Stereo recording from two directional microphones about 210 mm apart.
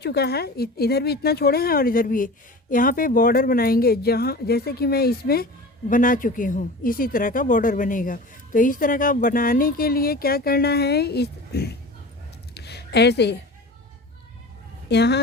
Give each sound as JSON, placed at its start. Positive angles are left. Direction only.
{"t": 0.0, "sound": "a woman's voice", "side_deg": 50}
{"t": 12.5, "sound": "a sound", "side_deg": 50}
{"t": 14.8, "sound": "speech", "side_deg": 55}